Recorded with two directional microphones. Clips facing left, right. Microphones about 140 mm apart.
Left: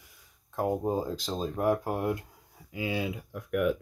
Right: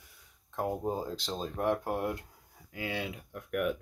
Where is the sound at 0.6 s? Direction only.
10° left (ahead or behind).